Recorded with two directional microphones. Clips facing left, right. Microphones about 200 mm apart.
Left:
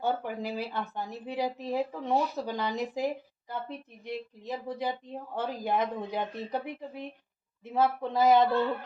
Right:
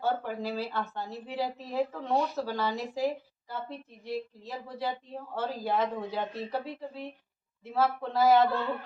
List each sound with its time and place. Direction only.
0.0 s speech: 15° left (ahead or behind)